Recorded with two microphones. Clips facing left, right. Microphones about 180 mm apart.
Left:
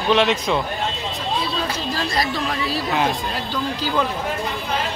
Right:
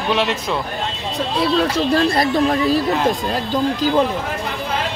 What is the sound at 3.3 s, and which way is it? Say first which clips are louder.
Speech: right 6 dB; 35° right (ahead or behind).